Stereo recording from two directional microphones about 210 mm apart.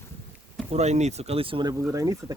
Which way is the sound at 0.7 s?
30° right (ahead or behind).